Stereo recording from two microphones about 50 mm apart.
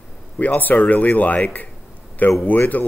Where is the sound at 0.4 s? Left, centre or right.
Left.